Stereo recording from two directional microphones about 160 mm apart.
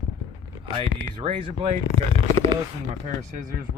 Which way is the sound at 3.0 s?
55° right (ahead or behind).